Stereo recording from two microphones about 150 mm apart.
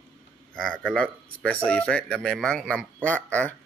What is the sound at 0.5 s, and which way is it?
Speech, 5° left (ahead or behind).